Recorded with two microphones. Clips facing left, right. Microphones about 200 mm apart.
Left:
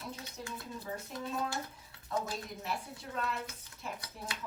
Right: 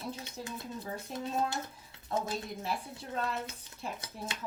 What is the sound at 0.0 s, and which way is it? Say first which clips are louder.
A woman's voice: right 3 dB; 25° right (ahead or behind).